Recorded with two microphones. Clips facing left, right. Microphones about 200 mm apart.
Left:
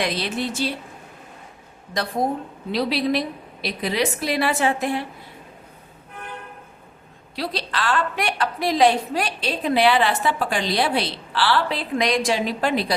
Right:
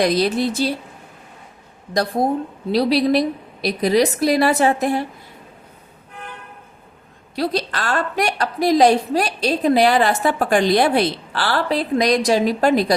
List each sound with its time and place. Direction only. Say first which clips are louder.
0.0 s a woman's voice: right 7 dB; 40° right (ahead or behind)
2.7 s a woman's voice: right 6 dB; 40° right (ahead or behind)
7.3 s a woman's voice: right 5 dB; 45° right (ahead or behind)